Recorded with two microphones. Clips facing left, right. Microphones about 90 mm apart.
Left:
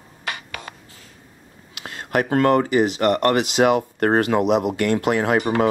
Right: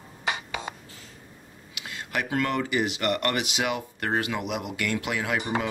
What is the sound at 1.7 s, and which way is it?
Speech, 45° left (ahead or behind).